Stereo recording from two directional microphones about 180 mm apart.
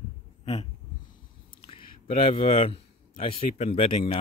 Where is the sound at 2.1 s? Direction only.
35° left (ahead or behind).